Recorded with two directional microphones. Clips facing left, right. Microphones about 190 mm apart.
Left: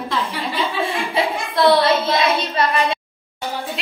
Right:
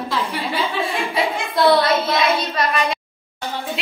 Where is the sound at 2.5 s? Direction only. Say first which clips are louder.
Left 2 dB; 30° left (ahead or behind).